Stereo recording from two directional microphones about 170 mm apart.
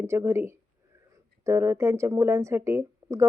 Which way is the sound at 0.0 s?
15° right (ahead or behind).